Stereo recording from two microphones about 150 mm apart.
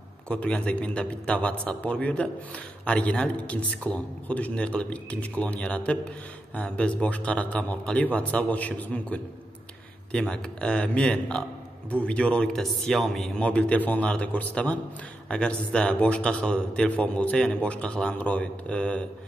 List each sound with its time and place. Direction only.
0.3 s a man's voice: 10° left (ahead or behind)